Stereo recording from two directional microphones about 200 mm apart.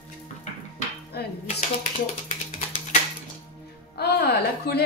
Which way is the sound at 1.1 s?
55° left (ahead or behind).